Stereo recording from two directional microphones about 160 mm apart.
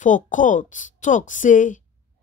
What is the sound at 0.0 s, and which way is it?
Speech, 50° left (ahead or behind).